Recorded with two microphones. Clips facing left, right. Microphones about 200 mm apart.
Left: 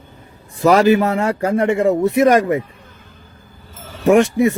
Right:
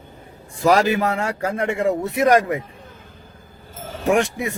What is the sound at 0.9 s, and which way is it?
Speech, 45° left (ahead or behind).